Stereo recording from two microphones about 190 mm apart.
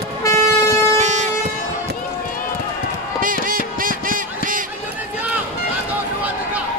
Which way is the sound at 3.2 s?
45° right (ahead or behind).